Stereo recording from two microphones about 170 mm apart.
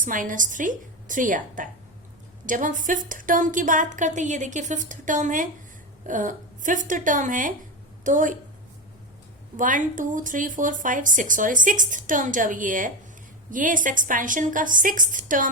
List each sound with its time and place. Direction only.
0.0 s a woman's voice: 50° right (ahead or behind)
9.6 s a woman's voice: 50° right (ahead or behind)